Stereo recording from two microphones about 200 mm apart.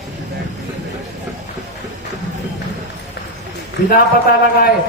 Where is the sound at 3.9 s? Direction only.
45° left (ahead or behind).